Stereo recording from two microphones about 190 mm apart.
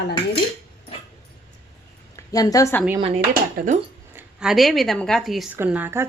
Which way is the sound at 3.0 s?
30° right (ahead or behind).